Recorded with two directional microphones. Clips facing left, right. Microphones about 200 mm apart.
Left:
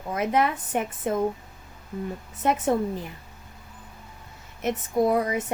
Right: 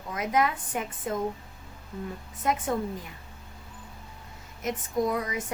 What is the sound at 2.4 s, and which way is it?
Speech, 30° left (ahead or behind).